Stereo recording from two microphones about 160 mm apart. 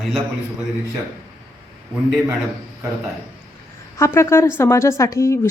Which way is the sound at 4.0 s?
15° left (ahead or behind).